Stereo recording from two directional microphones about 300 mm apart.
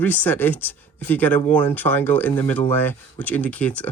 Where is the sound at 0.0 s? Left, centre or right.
Centre.